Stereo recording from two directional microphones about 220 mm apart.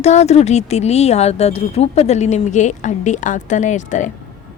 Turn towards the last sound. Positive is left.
turn(degrees=35)  # may be behind; listen again after turning